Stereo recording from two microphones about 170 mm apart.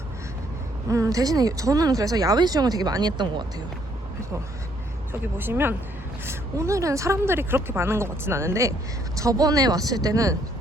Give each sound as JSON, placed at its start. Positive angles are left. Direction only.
{"t": 0.9, "sound": "speech", "side_deg": -20}
{"t": 5.2, "sound": "a woman's voice", "side_deg": -10}